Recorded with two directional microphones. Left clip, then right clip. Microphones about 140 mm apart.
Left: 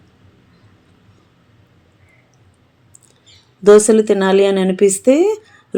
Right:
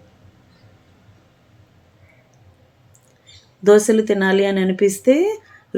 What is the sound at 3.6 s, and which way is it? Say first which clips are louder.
Speech: left 4 dB; 15° left (ahead or behind).